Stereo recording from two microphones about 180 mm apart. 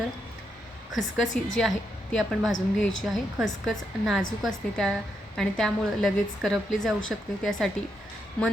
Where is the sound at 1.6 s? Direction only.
Centre (ahead or behind).